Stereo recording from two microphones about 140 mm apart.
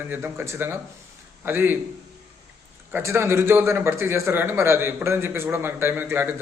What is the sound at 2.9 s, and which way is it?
A man's voice, 20° right (ahead or behind).